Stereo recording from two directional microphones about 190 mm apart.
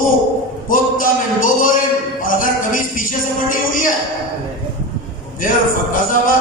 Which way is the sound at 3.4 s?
45° left (ahead or behind).